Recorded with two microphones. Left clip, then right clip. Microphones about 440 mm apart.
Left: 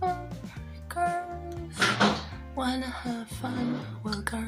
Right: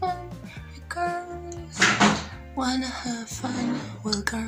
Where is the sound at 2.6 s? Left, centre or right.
Left.